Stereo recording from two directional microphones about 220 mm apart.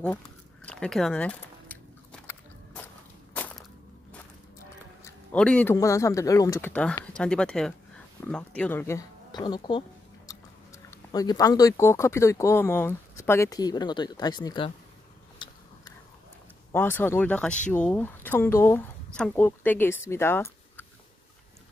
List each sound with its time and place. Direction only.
0.7 s biting: 5° left (ahead or behind)
5.0 s speech: 5° left (ahead or behind)
15.3 s a sound: 20° left (ahead or behind)
16.7 s speech: 10° left (ahead or behind)